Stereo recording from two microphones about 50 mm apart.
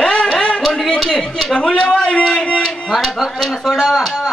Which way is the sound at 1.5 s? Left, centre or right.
Left.